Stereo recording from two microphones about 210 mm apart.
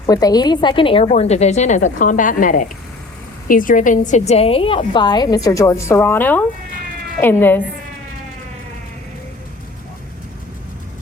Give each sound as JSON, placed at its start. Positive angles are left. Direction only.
{"t": 0.0, "sound": "a woman's voice", "side_deg": 20}